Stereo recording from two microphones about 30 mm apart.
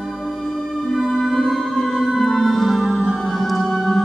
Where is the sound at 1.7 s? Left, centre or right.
Centre.